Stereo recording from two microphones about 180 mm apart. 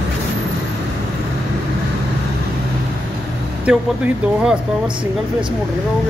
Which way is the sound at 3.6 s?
5° right (ahead or behind).